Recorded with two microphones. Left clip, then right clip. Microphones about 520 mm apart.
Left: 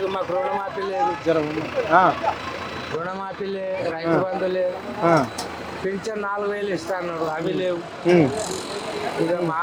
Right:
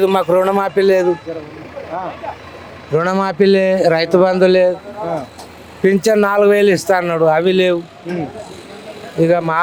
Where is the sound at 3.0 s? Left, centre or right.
Right.